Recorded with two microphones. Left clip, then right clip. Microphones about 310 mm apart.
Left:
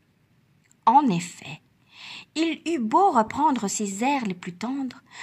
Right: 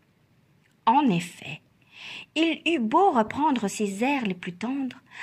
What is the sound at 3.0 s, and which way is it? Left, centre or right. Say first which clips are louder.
A woman's voice: left 3 dB; left.